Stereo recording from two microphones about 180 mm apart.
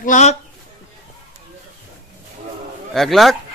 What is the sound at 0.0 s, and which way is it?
Speech, 40° left (ahead or behind).